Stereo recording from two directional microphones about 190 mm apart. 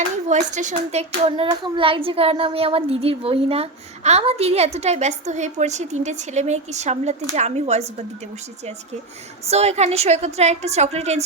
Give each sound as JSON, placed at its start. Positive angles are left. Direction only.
{"t": 0.3, "sound": "a child's voice", "side_deg": -40}
{"t": 9.5, "sound": "a child's voice", "side_deg": -35}